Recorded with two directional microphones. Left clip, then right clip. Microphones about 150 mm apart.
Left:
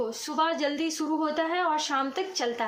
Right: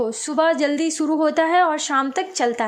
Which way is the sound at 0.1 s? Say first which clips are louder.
Right 8 dB; 35° right (ahead or behind).